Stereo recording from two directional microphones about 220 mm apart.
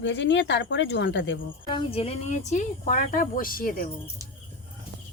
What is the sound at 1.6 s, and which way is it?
Speech, 25° left (ahead or behind).